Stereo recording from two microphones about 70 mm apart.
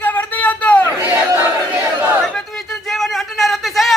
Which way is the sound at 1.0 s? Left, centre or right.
Right.